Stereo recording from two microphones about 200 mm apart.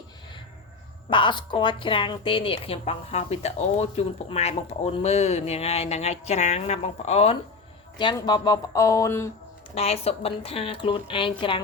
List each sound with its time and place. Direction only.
1.1 s a woman's voice: 25° left (ahead or behind)
7.9 s speech: 20° left (ahead or behind)
9.7 s a woman's voice: 30° left (ahead or behind)